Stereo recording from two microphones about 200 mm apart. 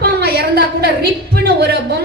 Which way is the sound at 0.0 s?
50° right (ahead or behind).